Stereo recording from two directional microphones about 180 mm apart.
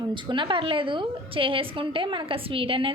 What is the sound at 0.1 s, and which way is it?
A woman's voice, 25° right (ahead or behind).